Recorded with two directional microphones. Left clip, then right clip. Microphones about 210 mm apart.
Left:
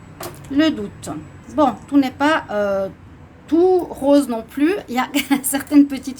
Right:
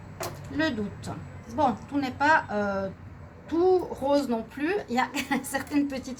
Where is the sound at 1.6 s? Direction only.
50° left (ahead or behind).